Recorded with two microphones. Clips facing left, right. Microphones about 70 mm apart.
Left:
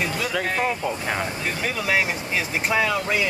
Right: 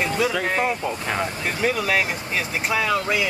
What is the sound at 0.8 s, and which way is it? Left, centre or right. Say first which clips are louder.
Speech: right 1 dB; centre.